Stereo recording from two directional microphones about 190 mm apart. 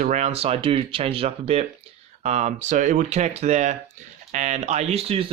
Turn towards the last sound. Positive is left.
turn(degrees=-30)  # may be behind; listen again after turning